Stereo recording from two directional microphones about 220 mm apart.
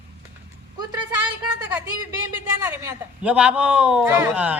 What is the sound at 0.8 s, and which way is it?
Speech, 20° right (ahead or behind).